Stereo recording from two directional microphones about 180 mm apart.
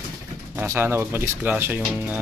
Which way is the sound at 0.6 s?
15° right (ahead or behind).